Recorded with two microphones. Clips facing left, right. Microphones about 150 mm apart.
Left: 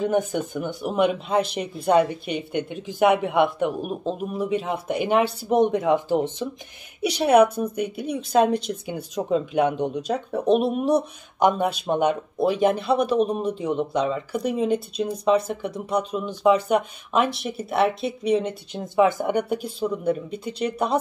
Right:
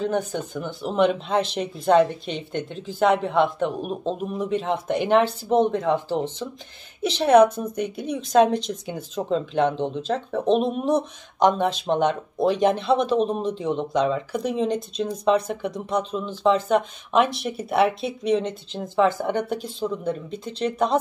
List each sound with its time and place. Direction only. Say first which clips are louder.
0.0 s speech: left 2 dB; 15° left (ahead or behind)